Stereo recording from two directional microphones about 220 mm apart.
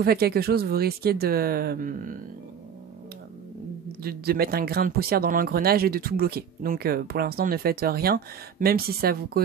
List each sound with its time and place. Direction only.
0.0 s speech: 45° right (ahead or behind)
4.0 s speech: 45° right (ahead or behind)